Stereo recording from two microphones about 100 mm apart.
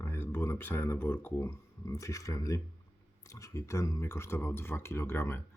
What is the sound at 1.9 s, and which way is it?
Speech, 35° left (ahead or behind).